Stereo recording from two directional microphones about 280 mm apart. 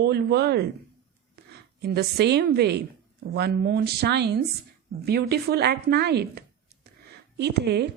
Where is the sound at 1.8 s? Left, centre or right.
Right.